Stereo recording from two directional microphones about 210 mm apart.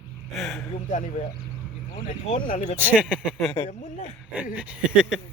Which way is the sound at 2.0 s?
35° left (ahead or behind).